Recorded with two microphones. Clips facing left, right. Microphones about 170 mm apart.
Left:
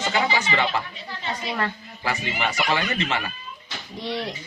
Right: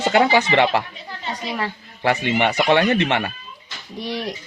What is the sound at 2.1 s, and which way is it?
Speech, 65° right (ahead or behind).